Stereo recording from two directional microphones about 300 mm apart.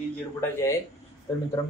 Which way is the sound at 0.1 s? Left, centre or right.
Centre.